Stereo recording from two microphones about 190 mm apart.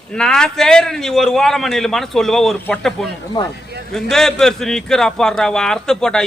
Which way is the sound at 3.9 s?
Centre (ahead or behind).